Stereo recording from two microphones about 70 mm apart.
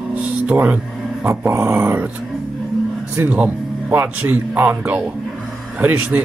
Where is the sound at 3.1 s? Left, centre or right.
Centre.